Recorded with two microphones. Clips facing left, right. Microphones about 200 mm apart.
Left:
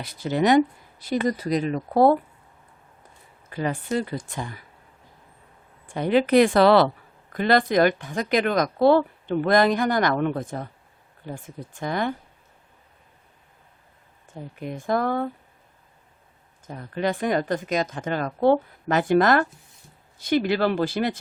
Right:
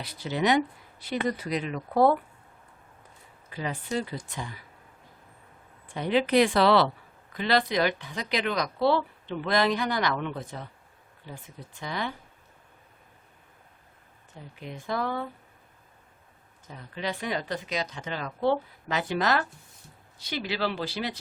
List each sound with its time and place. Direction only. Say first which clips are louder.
0.0 s speech: left 5 dB; 50° left (ahead or behind)
3.5 s speech: left 5 dB; 50° left (ahead or behind)
5.9 s speech: left 5 dB; 50° left (ahead or behind)
14.3 s speech: left 8 dB; 50° left (ahead or behind)
16.6 s speech: left 8 dB; 50° left (ahead or behind)